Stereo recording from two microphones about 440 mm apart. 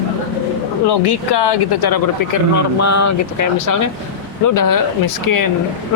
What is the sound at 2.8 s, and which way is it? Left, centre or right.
Speech, left.